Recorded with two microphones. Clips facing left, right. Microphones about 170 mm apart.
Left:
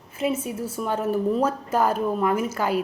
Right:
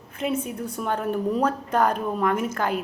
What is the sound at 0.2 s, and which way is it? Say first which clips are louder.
A woman's voice: left 1 dB; 5° left (ahead or behind).